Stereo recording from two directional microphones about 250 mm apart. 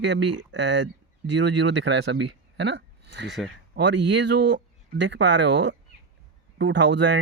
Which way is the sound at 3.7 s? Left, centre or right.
Right.